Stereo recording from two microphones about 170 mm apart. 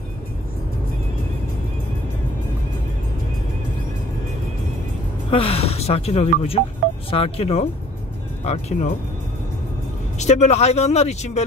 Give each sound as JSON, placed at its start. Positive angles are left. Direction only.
{"t": 5.3, "sound": "speech", "side_deg": 35}
{"t": 10.1, "sound": "speech", "side_deg": 40}